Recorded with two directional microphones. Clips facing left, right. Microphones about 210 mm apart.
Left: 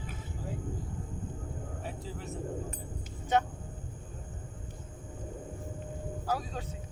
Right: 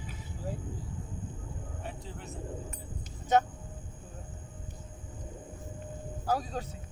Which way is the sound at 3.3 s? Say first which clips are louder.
Right 2 dB; 45° right (ahead or behind).